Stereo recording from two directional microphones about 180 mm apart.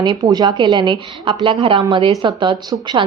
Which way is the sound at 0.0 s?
25° right (ahead or behind).